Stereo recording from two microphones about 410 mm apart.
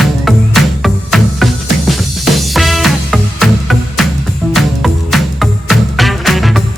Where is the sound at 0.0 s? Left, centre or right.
Centre.